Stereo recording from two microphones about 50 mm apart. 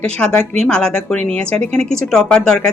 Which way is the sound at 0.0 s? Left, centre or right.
Centre.